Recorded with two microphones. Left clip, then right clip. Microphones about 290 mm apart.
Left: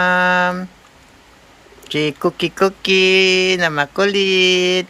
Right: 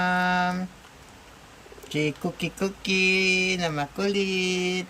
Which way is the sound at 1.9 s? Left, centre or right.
Centre.